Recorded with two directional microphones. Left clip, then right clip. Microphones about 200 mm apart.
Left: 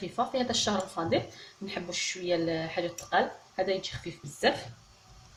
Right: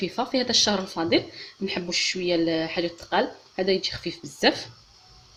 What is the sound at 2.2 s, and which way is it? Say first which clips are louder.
Speech: right 6 dB; 45° right (ahead or behind).